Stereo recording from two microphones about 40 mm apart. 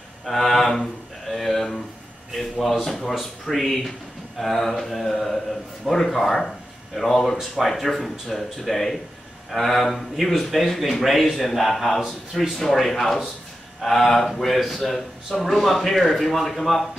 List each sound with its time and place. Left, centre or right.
0.2 s a sound: centre
2.3 s a man's voice: centre
15.3 s a man's voice: centre
15.6 s speech: centre